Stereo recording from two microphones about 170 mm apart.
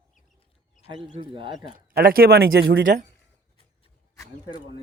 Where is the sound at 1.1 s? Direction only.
30° right (ahead or behind).